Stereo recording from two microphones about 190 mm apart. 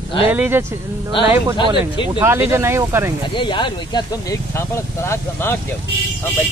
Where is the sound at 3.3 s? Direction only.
25° left (ahead or behind).